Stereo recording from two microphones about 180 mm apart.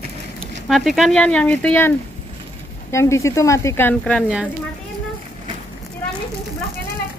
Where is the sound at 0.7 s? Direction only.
Centre (ahead or behind).